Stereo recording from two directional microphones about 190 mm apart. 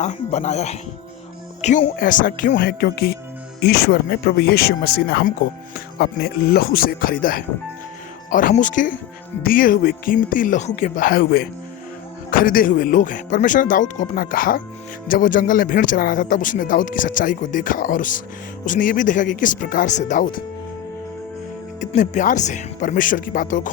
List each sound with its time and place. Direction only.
0.0 s speech: 35° left (ahead or behind)
21.8 s speech: 40° left (ahead or behind)